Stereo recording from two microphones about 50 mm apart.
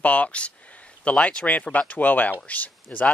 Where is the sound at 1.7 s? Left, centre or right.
Left.